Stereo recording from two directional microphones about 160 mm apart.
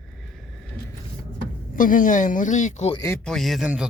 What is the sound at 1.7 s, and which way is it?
Speech, 55° left (ahead or behind).